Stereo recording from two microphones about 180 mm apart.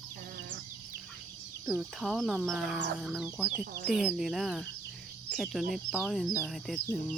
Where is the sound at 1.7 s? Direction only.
Centre (ahead or behind).